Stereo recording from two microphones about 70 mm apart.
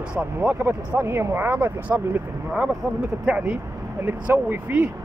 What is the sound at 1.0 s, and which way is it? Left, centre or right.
Speech, right.